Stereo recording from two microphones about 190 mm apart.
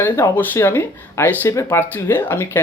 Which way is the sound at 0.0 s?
10° left (ahead or behind).